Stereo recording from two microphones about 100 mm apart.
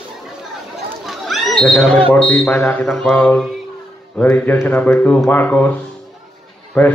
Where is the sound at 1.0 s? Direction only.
Centre (ahead or behind).